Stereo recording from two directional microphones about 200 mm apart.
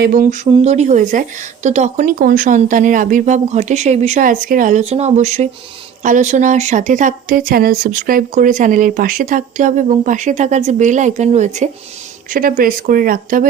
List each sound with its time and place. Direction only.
0.0 s speech: 45° right (ahead or behind)